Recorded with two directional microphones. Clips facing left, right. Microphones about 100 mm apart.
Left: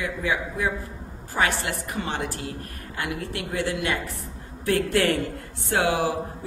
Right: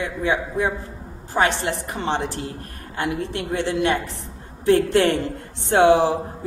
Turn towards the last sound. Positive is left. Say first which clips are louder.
# right 8 dB
turn(degrees=-25)  # may be behind; listen again after turning